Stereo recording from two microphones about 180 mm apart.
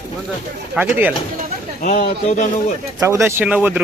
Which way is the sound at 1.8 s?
45° left (ahead or behind).